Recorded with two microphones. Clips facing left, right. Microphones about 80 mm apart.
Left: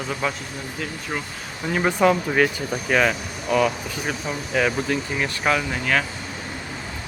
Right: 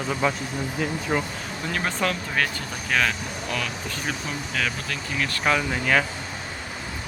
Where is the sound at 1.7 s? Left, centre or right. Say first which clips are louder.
Left 8 dB; centre.